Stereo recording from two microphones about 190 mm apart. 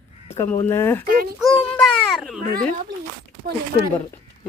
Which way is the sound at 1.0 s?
55° right (ahead or behind).